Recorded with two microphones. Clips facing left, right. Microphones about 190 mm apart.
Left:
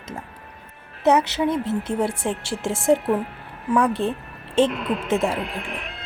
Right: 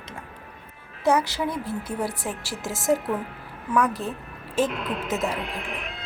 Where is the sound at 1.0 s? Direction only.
20° left (ahead or behind).